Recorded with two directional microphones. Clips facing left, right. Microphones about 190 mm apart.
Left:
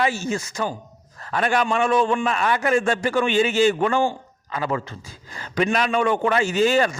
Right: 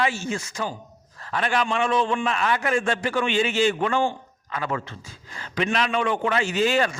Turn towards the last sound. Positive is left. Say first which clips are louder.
# left 3 dB
turn(degrees=40)  # may be behind; listen again after turning